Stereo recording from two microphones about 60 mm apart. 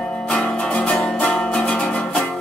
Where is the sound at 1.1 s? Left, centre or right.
Left.